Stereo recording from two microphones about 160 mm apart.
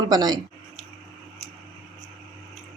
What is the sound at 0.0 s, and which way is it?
Speech, 25° right (ahead or behind).